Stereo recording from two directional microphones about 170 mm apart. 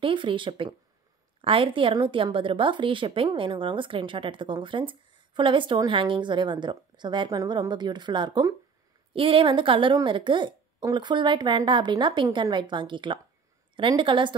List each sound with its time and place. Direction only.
0.0 s a woman's voice: 30° right (ahead or behind)